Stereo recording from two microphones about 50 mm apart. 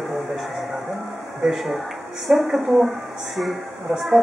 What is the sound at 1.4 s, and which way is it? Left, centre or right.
Speech, centre.